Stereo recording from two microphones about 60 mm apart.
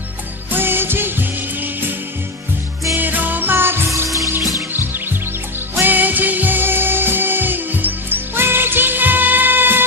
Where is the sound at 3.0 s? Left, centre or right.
Right.